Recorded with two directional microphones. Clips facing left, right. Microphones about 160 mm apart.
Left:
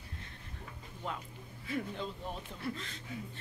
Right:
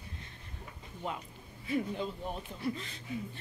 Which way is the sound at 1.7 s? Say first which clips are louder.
Right 4 dB; 5° right (ahead or behind).